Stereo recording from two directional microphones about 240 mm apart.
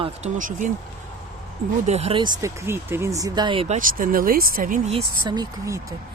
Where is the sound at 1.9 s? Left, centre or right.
Right.